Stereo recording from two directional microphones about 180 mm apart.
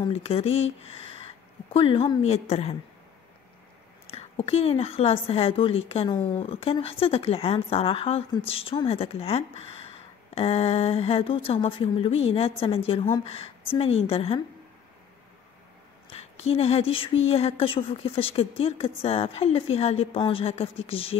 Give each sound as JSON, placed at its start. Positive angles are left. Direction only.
{"t": 0.0, "sound": "a woman's voice", "side_deg": 35}
{"t": 4.1, "sound": "a woman's voice", "side_deg": 35}
{"t": 16.1, "sound": "a woman's voice", "side_deg": 35}